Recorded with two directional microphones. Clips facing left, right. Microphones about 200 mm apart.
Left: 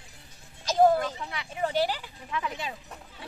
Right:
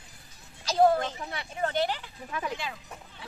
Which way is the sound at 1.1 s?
35° right (ahead or behind).